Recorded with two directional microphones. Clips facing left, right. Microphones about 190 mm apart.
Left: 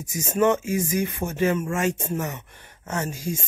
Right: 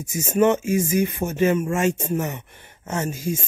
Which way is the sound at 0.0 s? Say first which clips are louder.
Right 3 dB; 25° right (ahead or behind).